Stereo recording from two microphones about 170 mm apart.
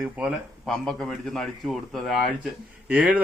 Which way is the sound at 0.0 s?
5° right (ahead or behind).